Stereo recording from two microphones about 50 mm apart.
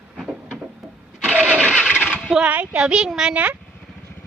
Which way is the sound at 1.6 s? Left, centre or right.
Left.